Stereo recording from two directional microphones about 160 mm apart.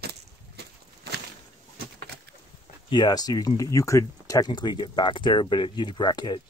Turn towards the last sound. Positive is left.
turn(degrees=25)  # may be behind; listen again after turning